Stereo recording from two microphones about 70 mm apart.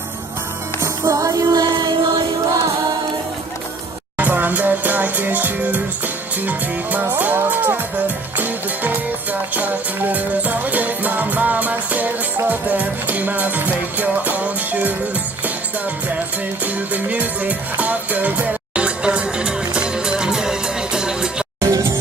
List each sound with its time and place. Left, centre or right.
0.8 s music: right
4.2 s music: right
16.6 s music: right
21.6 s music: right